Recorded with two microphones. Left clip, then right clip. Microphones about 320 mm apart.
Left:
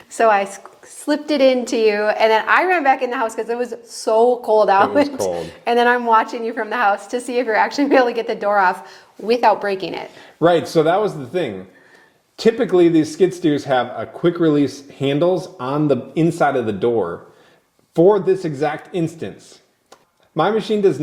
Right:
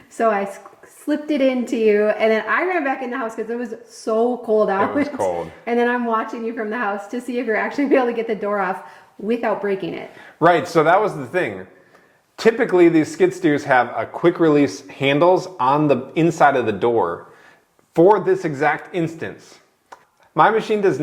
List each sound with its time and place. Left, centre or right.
0.2 s a woman's voice: left
5.6 s a woman's voice: left
10.4 s speech: right
19.9 s a sound: right
20.7 s speech: right